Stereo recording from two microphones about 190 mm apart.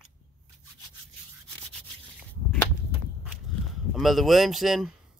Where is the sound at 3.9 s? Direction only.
Centre (ahead or behind).